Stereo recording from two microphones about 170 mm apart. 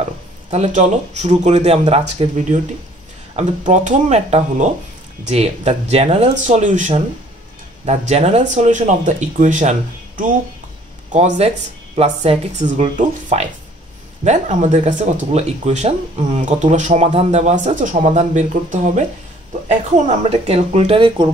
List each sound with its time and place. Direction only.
0.5 s speech: 45° right (ahead or behind)
8.1 s speech: 40° right (ahead or behind)
20.1 s speech: 35° right (ahead or behind)